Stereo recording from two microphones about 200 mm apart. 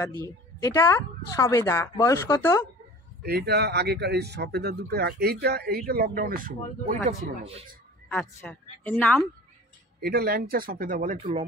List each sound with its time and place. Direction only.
0.6 s a woman's voice: 15° left (ahead or behind)
3.2 s a man's voice: 55° right (ahead or behind)
8.1 s a woman's voice: 5° left (ahead or behind)
9.9 s a man's voice: 50° right (ahead or behind)